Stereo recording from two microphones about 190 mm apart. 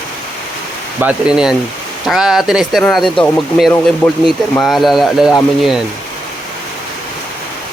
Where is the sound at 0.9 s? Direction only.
5° right (ahead or behind).